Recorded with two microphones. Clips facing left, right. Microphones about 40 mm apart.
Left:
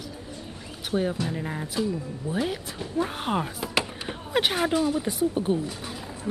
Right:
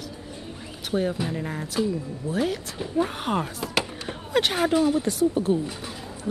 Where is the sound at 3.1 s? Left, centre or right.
Centre.